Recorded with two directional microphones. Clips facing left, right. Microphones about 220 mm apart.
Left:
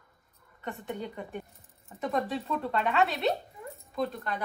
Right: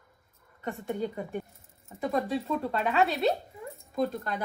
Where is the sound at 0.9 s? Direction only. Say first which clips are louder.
Right 6 dB; 45° right (ahead or behind).